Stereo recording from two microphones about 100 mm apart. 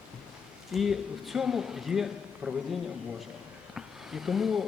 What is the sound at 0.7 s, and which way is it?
A man's voice, centre (ahead or behind).